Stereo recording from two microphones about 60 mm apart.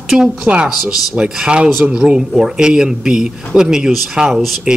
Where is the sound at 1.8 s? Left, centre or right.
Centre.